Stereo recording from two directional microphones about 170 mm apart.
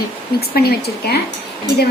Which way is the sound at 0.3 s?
65° left (ahead or behind).